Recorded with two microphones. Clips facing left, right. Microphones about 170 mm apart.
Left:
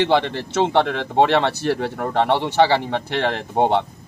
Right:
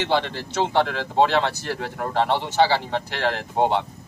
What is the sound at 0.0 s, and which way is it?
Speech, 60° left (ahead or behind).